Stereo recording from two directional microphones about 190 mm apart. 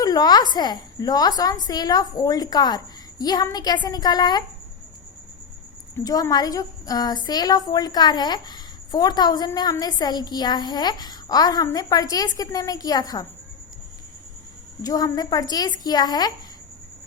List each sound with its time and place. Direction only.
0.0 s a woman's voice: 20° left (ahead or behind)
6.0 s a woman's voice: 20° left (ahead or behind)
14.8 s a woman's voice: 20° left (ahead or behind)